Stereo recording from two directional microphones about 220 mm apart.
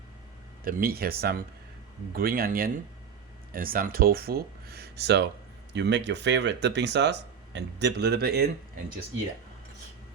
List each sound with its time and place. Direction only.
0.6 s speech: 40° right (ahead or behind)